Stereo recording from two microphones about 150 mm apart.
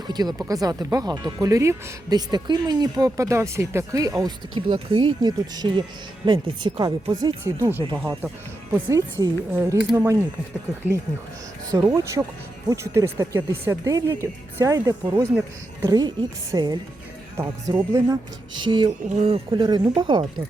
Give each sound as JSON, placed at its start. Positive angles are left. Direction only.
{"t": 0.1, "sound": "speech", "side_deg": -25}
{"t": 11.7, "sound": "speech", "side_deg": -25}
{"t": 18.6, "sound": "speech", "side_deg": -35}
{"t": 19.0, "sound": "speech", "side_deg": -45}